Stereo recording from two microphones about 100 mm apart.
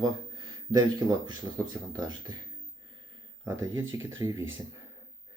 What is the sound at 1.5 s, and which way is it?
Speech, 30° right (ahead or behind).